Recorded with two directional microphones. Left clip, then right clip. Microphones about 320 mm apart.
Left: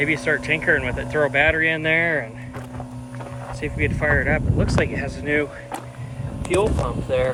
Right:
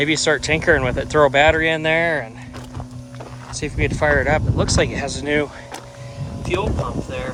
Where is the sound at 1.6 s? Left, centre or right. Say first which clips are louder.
Right 2 dB; centre.